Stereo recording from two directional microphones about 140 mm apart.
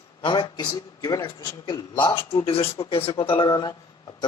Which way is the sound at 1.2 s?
30° left (ahead or behind).